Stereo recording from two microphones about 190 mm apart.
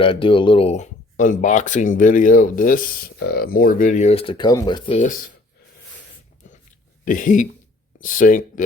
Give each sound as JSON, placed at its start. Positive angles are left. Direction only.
{"t": 0.0, "sound": "speech", "side_deg": 25}
{"t": 6.4, "sound": "a sound", "side_deg": 40}
{"t": 7.0, "sound": "speech", "side_deg": 45}